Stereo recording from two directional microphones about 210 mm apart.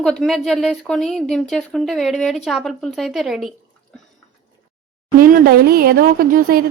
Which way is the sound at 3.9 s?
5° left (ahead or behind).